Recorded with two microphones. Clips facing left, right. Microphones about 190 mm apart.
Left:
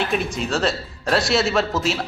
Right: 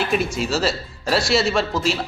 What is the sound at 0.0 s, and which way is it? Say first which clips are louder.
Speech: right 1 dB; centre (ahead or behind).